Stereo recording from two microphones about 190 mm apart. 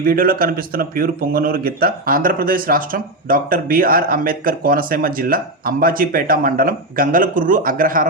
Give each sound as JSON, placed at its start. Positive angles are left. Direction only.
{"t": 0.0, "sound": "a man's voice", "side_deg": -50}